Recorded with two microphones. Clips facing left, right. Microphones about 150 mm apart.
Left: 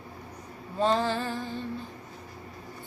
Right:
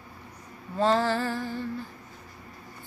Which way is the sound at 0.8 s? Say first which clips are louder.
Right 2 dB; 20° left (ahead or behind).